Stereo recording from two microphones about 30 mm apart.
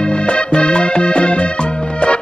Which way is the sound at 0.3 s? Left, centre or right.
Left.